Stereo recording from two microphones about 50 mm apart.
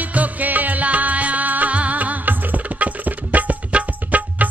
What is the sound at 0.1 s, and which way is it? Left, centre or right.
Music, right.